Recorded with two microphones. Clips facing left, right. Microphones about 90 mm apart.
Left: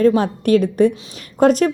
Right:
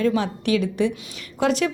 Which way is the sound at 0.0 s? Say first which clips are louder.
Left 7 dB; 40° left (ahead or behind).